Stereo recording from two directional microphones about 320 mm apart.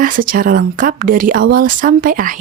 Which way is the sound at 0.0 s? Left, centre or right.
Right.